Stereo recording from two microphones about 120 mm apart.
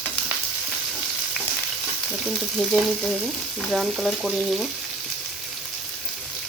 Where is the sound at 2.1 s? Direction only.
Centre (ahead or behind).